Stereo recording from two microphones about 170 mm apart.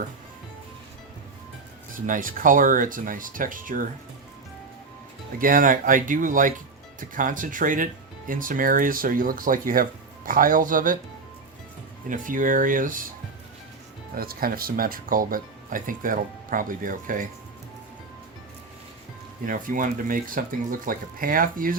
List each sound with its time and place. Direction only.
1.9 s speech: 50° right (ahead or behind)
5.4 s speech: 55° right (ahead or behind)
12.0 s speech: 50° right (ahead or behind)
14.2 s speech: 60° right (ahead or behind)
19.5 s speech: 50° right (ahead or behind)